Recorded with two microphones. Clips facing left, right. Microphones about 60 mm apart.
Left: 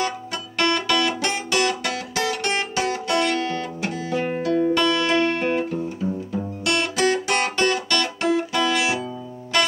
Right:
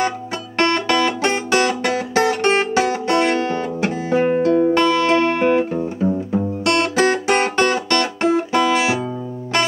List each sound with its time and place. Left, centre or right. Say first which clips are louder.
0.6 s music: right 4 dB; right